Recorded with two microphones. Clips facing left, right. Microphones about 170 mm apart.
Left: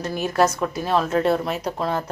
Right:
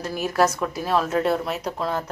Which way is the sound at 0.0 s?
5° right (ahead or behind).